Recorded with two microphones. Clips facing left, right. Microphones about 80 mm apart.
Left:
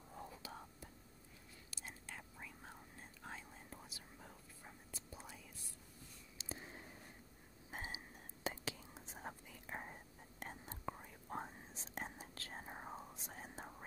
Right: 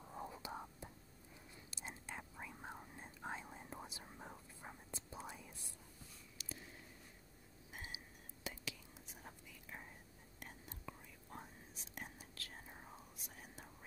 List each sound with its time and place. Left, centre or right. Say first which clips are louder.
0.1 s whispering: right 4 dB; right
6.3 s a sound: left 4 dB; left
8.5 s whispering: left 5 dB; left
10.4 s whispering: left 6 dB; left